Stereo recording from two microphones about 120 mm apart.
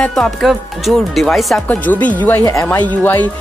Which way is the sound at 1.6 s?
15° left (ahead or behind).